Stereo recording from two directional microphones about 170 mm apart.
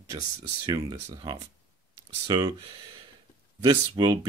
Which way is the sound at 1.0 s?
25° right (ahead or behind).